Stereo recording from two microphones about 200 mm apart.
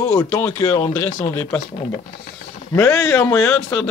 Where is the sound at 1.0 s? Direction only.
5° left (ahead or behind).